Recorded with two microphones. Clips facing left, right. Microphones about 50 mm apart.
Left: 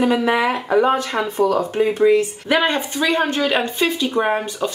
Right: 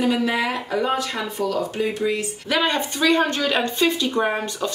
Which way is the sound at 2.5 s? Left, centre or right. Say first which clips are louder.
Left 3 dB; centre.